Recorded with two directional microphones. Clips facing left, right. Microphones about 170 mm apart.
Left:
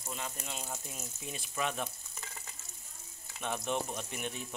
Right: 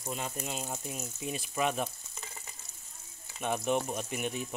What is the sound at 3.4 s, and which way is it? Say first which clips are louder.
Speech: right 5 dB; 15° right (ahead or behind).